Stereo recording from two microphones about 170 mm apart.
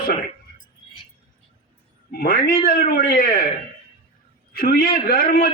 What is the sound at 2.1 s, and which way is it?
Speech, 60° left (ahead or behind).